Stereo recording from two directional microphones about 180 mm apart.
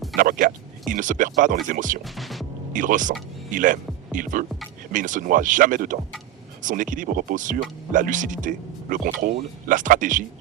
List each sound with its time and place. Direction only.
0.2 s speech: 50° right (ahead or behind)
2.0 s speech: centre (ahead or behind)
2.7 s speech: 45° right (ahead or behind)